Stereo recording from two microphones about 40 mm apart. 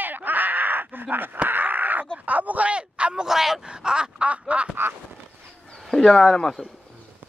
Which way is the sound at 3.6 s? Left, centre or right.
Centre.